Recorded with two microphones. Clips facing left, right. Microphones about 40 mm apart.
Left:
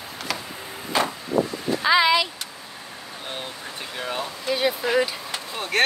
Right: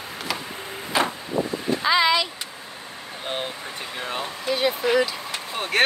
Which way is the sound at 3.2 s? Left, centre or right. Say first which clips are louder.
Right 5 dB; right.